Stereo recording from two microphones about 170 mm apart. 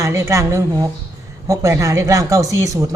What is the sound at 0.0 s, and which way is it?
Speech, 15° right (ahead or behind).